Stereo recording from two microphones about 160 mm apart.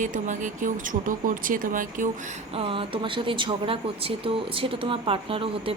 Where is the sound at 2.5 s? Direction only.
35° right (ahead or behind).